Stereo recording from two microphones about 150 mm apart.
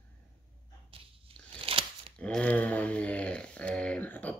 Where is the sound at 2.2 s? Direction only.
10° left (ahead or behind).